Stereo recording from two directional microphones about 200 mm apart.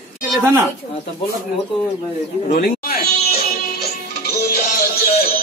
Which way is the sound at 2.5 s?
50° left (ahead or behind).